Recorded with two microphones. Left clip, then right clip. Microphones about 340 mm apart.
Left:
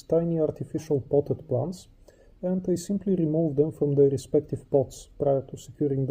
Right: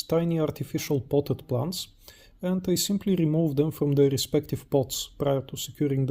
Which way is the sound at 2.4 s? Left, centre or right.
Right.